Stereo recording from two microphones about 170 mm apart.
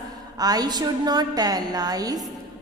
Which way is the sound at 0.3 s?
20° right (ahead or behind).